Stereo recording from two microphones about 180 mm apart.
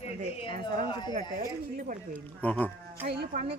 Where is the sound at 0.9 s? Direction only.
25° left (ahead or behind).